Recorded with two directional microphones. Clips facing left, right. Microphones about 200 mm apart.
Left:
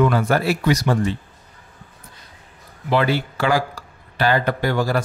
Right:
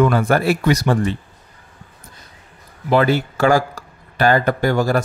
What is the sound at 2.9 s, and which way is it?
Speech, 45° right (ahead or behind).